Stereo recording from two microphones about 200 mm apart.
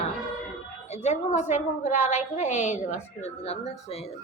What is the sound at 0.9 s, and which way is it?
A woman's voice, 35° left (ahead or behind).